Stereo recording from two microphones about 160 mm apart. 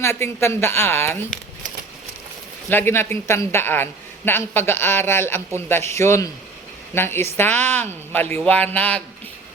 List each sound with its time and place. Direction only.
0.0 s speech: 15° left (ahead or behind)
2.6 s speech: 15° left (ahead or behind)